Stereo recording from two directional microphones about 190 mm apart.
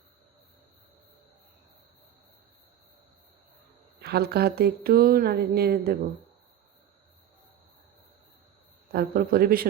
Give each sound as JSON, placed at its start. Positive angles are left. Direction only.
{"t": 4.0, "sound": "speech", "side_deg": -55}
{"t": 8.9, "sound": "a man's voice", "side_deg": -55}